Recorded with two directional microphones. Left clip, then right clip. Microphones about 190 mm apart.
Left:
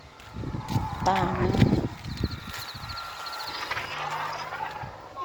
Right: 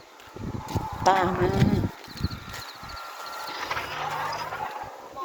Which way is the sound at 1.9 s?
50° right (ahead or behind).